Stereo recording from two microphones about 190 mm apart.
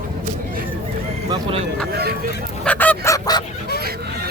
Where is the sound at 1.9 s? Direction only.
55° right (ahead or behind).